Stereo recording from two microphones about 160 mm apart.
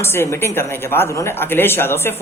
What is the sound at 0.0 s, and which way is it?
A woman's voice, 15° left (ahead or behind).